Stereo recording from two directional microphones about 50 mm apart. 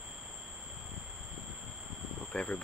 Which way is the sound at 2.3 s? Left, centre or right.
Left.